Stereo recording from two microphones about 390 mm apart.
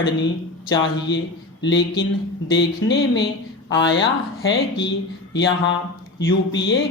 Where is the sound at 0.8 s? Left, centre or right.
Left.